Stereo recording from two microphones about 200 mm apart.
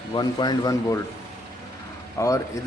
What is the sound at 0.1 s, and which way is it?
Speech, 20° left (ahead or behind).